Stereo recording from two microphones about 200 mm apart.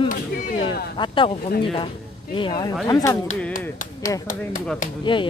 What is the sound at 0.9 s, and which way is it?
Speech, 25° left (ahead or behind).